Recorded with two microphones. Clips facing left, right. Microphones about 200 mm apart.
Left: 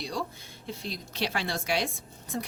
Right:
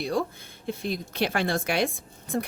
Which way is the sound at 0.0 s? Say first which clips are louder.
Right 7 dB; 55° right (ahead or behind).